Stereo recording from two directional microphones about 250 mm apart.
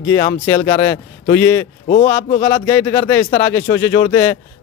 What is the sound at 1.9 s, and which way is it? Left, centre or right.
Speech, left.